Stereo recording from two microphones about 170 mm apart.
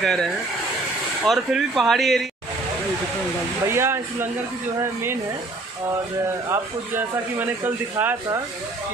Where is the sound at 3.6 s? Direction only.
15° right (ahead or behind).